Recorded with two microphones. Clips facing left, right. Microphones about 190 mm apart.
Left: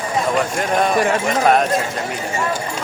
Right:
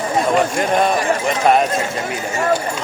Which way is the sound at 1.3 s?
Centre (ahead or behind).